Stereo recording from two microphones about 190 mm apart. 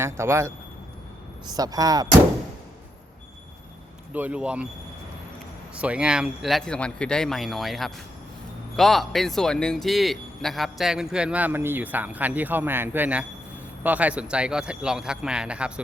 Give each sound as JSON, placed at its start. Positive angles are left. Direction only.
{"t": 0.0, "sound": "a man's voice", "side_deg": -15}
{"t": 4.1, "sound": "speech", "side_deg": -10}
{"t": 5.7, "sound": "a man's voice", "side_deg": -5}